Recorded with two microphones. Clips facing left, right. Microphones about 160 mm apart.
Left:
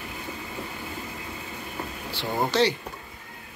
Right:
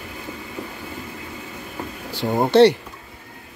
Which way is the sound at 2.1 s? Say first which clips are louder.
Right 7 dB; 40° right (ahead or behind).